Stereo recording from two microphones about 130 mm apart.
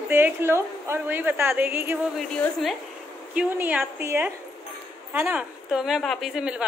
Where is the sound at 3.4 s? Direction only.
10° right (ahead or behind).